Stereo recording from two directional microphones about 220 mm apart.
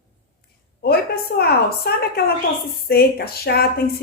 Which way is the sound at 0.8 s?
45° left (ahead or behind).